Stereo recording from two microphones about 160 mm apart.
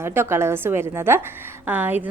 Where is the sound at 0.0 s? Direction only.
15° right (ahead or behind).